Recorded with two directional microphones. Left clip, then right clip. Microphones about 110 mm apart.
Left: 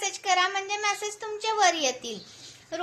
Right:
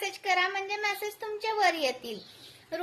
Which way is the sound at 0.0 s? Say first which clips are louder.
Left 3 dB; 30° right (ahead or behind).